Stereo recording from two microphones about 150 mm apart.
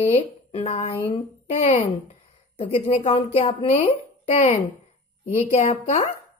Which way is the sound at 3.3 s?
50° left (ahead or behind).